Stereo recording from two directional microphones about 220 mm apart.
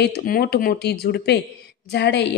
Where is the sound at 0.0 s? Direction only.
45° left (ahead or behind).